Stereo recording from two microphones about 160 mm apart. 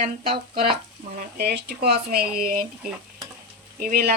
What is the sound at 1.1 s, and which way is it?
Speech, 75° right (ahead or behind).